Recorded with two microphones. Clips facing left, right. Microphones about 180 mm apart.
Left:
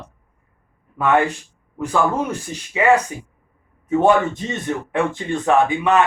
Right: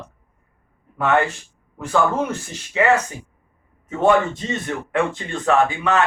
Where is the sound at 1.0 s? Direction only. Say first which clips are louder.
Left 2 dB; 10° left (ahead or behind).